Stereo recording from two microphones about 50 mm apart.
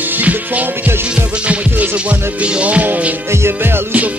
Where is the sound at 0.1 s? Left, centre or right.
Right.